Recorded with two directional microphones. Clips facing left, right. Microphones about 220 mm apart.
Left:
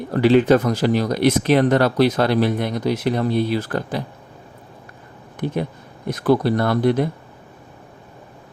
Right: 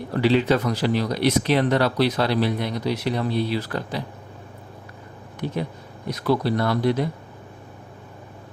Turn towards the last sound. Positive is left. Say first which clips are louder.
# left 4 dB
turn(degrees=50)  # may be behind; listen again after turning